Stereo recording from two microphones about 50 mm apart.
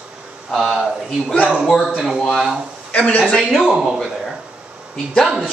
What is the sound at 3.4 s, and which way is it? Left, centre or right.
Speech, centre.